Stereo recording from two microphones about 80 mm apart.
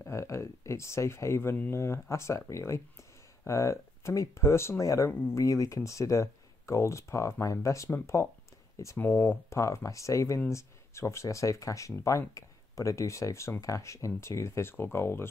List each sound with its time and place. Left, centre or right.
0.0 s speech: left
8.9 s speech: left
9.5 s speech: left